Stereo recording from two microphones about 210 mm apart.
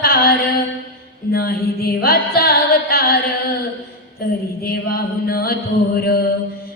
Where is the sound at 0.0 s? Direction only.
45° left (ahead or behind).